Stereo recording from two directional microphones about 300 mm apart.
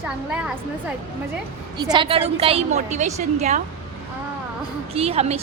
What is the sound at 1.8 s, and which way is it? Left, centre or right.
A woman's voice, centre.